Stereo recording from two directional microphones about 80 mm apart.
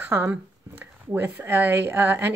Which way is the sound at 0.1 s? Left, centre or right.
Right.